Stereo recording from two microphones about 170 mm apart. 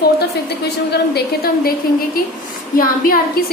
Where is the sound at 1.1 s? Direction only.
65° left (ahead or behind).